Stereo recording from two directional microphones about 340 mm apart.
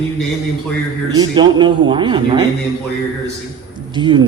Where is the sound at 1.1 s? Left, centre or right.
Centre.